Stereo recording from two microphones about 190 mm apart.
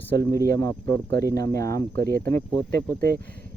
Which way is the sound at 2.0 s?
55° right (ahead or behind).